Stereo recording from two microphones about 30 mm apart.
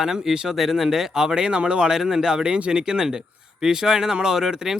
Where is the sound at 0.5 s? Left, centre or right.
Centre; by 1.8 s right.